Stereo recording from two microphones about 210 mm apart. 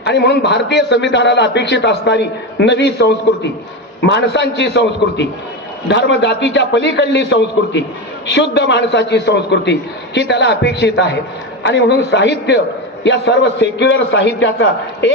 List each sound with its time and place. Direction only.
0.0 s a man's voice: 55° left (ahead or behind)